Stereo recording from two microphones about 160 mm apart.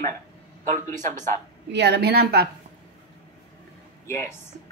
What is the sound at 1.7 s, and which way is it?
Speech, 90° right.